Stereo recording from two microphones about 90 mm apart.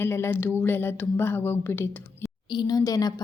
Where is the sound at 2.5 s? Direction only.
50° left (ahead or behind).